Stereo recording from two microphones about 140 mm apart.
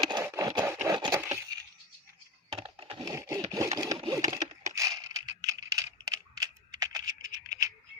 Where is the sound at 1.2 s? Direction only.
20° right (ahead or behind).